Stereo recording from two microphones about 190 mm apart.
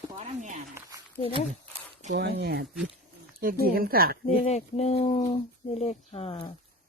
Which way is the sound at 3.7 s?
50° right (ahead or behind).